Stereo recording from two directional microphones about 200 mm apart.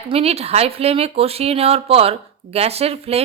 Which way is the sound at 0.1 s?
30° right (ahead or behind).